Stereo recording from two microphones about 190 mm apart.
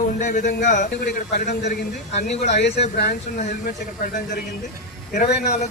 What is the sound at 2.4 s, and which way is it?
Speech, 65° left (ahead or behind).